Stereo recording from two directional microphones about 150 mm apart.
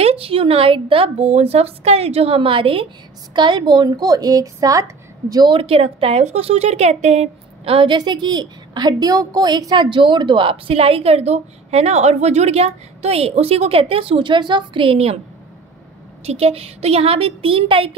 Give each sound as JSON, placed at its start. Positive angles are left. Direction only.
{"t": 0.0, "sound": "speech", "side_deg": -40}
{"t": 16.3, "sound": "speech", "side_deg": -40}